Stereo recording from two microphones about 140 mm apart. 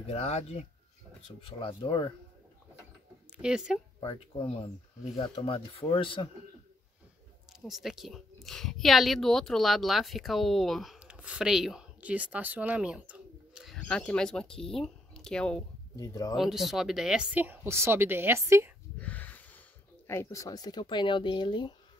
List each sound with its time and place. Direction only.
0.0 s speech: 45° left (ahead or behind)
1.4 s speech: 35° left (ahead or behind)
3.3 s speech: 5° right (ahead or behind)
4.0 s speech: 40° left (ahead or behind)
7.6 s speech: centre (ahead or behind)
13.7 s speech: 5° left (ahead or behind)
16.0 s speech: 25° left (ahead or behind)
16.3 s speech: centre (ahead or behind); by 18.7 s 20° right (ahead or behind)
18.9 s a sound: 10° left (ahead or behind)
20.1 s speech: 20° left (ahead or behind)